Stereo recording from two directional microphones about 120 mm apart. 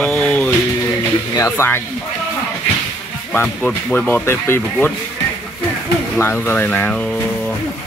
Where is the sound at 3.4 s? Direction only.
10° left (ahead or behind).